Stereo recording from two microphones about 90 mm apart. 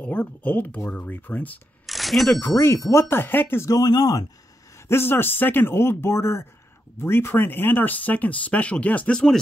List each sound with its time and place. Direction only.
0.0 s speech: 15° left (ahead or behind)
0.8 s speech: 10° left (ahead or behind)
1.9 s a sound: centre (ahead or behind)
2.4 s a man's voice: 30° left (ahead or behind)
3.6 s speech: 45° left (ahead or behind)
4.7 s a man's voice: 30° left (ahead or behind); by 9.4 s 10° left (ahead or behind)